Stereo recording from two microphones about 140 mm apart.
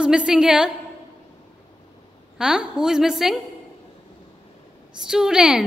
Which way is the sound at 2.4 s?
5° right (ahead or behind).